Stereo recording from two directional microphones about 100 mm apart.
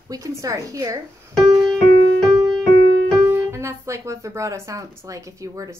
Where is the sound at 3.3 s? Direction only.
25° right (ahead or behind).